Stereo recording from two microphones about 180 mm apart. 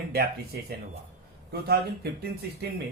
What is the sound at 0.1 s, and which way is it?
Speech, 60° right (ahead or behind).